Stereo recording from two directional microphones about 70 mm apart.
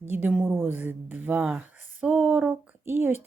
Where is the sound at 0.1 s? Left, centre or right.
Right.